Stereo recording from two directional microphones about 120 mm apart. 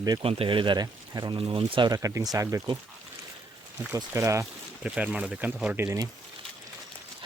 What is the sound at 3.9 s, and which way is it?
Speech, 25° right (ahead or behind).